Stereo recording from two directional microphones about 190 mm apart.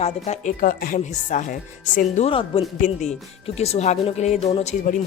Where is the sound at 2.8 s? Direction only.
40° left (ahead or behind).